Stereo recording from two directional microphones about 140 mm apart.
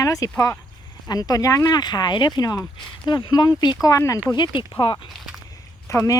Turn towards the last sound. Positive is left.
turn(degrees=20)  # may be behind; listen again after turning